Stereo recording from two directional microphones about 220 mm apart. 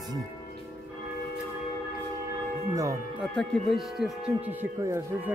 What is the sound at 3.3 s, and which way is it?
Speech, centre (ahead or behind).